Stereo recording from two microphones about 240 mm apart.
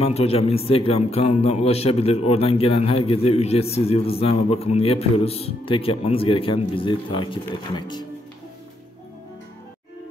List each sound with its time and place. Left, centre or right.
0.0 s a man's voice: left